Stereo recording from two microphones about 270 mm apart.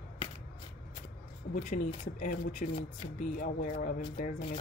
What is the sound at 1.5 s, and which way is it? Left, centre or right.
Speech, left.